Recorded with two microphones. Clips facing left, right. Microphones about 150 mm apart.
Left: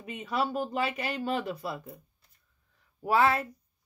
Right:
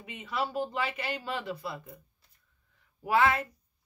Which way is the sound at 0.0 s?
40° left (ahead or behind).